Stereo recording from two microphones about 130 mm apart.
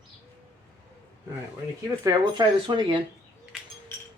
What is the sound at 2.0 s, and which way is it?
Speech, 35° right (ahead or behind).